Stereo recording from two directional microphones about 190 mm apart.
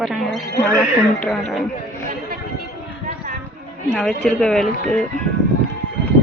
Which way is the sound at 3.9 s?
5° left (ahead or behind).